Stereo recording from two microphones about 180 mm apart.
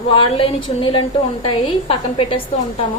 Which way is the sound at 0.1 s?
30° left (ahead or behind).